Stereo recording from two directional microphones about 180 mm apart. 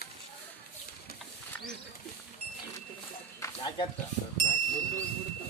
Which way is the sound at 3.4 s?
15° left (ahead or behind).